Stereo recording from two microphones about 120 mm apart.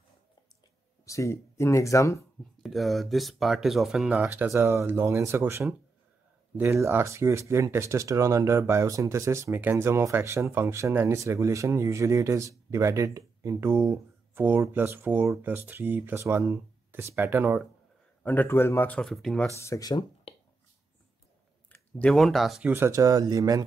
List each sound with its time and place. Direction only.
1.0 s speech: 25° left (ahead or behind)
2.6 s speech: centre (ahead or behind); by 17.6 s 20° right (ahead or behind)
18.2 s speech: 15° left (ahead or behind)
19.6 s speech: 30° left (ahead or behind)
21.9 s speech: 5° left (ahead or behind)
22.7 s speech: 20° right (ahead or behind)